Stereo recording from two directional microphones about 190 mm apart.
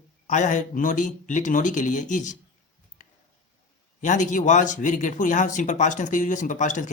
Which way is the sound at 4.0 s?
40° left (ahead or behind).